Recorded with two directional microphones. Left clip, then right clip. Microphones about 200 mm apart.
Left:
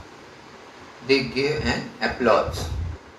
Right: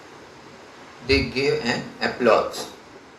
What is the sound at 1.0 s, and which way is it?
A man's voice, 30° right (ahead or behind).